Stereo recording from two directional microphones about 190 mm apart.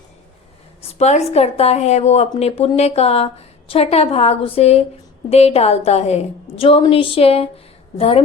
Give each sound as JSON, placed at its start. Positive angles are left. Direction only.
{"t": 0.8, "sound": "a woman's voice", "side_deg": 35}